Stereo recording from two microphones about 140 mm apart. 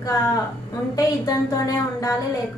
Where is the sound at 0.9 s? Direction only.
25° left (ahead or behind).